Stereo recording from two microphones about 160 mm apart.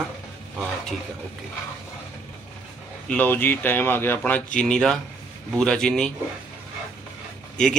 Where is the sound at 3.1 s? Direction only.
10° left (ahead or behind).